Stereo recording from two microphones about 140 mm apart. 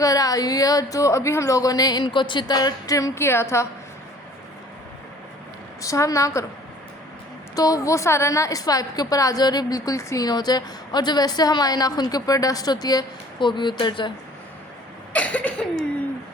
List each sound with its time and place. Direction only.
0.0 s a woman's voice: 25° left (ahead or behind)
5.8 s a woman's voice: 25° left (ahead or behind)
7.5 s a woman's voice: 25° left (ahead or behind)
15.1 s a sound: 10° left (ahead or behind)